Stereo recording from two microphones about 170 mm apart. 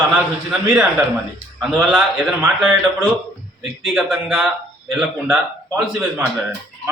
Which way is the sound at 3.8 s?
Centre (ahead or behind).